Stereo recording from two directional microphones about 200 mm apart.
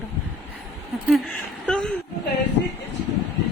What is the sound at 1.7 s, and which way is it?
Speech, 5° left (ahead or behind).